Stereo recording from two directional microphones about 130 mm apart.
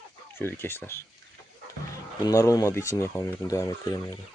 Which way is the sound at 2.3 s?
25° left (ahead or behind).